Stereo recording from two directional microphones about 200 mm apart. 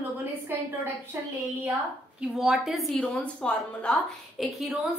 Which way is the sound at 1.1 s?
10° right (ahead or behind).